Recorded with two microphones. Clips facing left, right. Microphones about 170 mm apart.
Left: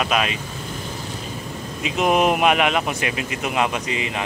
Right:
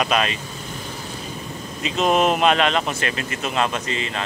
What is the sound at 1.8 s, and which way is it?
Speech, 15° left (ahead or behind).